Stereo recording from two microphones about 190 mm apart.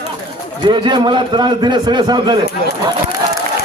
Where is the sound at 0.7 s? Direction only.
25° right (ahead or behind).